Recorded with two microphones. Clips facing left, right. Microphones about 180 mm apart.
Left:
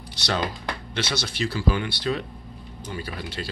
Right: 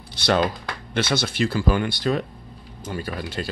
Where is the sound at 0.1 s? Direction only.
55° right (ahead or behind).